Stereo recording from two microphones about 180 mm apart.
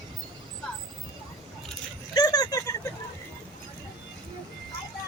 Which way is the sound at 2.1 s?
20° left (ahead or behind).